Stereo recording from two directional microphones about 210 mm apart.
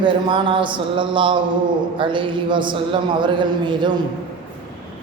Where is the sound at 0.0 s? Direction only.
25° right (ahead or behind).